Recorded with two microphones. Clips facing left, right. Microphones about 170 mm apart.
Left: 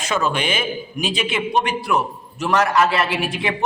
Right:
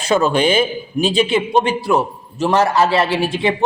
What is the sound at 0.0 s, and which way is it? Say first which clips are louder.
A man's voice: right 7 dB; 30° right (ahead or behind).